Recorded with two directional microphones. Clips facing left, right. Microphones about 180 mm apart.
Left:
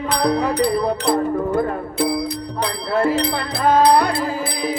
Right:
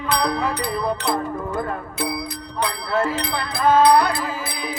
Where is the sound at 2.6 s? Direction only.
30° left (ahead or behind).